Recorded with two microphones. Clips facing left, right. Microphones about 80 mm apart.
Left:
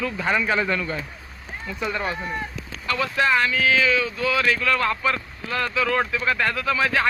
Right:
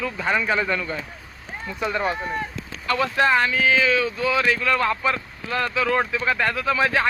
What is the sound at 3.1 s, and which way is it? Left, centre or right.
Speech, right.